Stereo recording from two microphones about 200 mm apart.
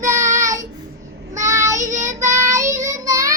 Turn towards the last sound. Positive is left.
turn(degrees=-15)  # may be behind; listen again after turning